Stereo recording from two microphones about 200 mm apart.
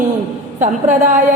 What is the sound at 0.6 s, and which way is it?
Speech, 40° right (ahead or behind).